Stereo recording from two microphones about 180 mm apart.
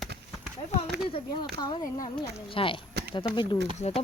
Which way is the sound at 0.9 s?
70° right (ahead or behind).